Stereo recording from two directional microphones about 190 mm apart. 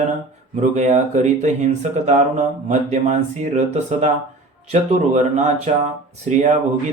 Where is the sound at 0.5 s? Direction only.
35° right (ahead or behind).